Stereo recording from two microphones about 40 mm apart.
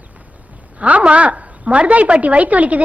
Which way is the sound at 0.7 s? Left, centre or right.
Right.